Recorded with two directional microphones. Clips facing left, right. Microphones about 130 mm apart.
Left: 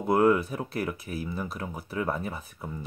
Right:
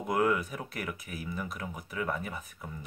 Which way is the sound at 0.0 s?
30° left (ahead or behind).